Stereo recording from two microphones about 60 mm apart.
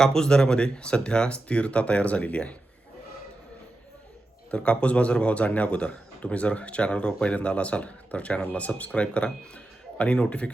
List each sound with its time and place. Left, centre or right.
0.0 s speech: centre
4.5 s speech: centre